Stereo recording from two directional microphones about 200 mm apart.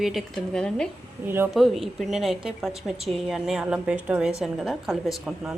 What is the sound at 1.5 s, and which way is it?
A woman's voice, centre (ahead or behind).